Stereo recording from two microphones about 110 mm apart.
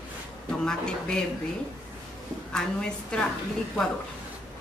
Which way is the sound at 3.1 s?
10° left (ahead or behind).